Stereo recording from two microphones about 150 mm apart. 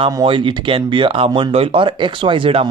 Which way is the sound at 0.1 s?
30° right (ahead or behind).